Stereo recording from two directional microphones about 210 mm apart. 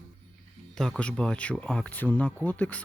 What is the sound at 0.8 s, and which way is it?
Speech, 5° left (ahead or behind).